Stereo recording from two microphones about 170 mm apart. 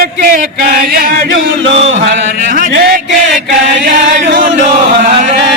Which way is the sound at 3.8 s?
45° right (ahead or behind).